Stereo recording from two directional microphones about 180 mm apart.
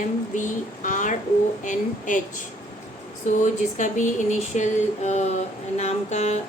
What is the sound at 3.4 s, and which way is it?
Speech, 45° left (ahead or behind).